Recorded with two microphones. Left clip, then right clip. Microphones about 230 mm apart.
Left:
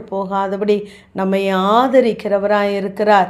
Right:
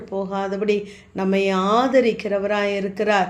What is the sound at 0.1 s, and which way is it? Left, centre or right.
Speech, centre.